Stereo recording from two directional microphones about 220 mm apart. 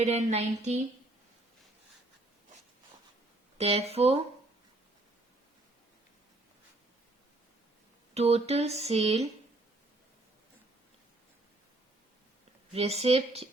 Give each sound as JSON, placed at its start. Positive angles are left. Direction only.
{"t": 0.0, "sound": "speech", "side_deg": -30}
{"t": 3.6, "sound": "speech", "side_deg": -30}
{"t": 8.1, "sound": "speech", "side_deg": -30}
{"t": 12.7, "sound": "speech", "side_deg": -30}